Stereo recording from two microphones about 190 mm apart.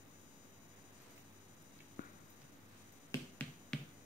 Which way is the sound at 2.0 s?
50° left (ahead or behind).